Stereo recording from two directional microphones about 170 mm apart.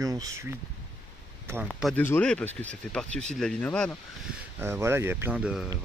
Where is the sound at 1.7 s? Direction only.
Centre (ahead or behind).